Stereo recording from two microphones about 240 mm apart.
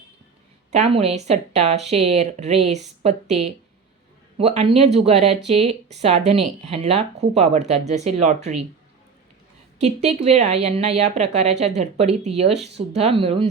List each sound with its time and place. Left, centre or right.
0.8 s speech: right
10.2 s speech: right